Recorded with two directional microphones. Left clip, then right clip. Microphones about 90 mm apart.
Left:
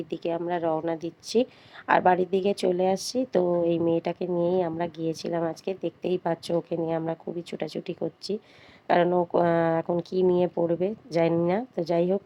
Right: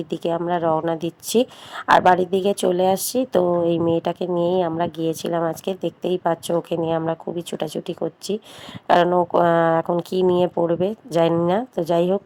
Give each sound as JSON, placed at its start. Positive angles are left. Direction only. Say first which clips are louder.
{"t": 0.0, "sound": "speech", "louder": "right 6 dB", "side_deg": -35}
{"t": 0.9, "sound": "speech", "louder": "right 5 dB", "side_deg": -40}
{"t": 1.7, "sound": "speech", "louder": "right 7 dB", "side_deg": -25}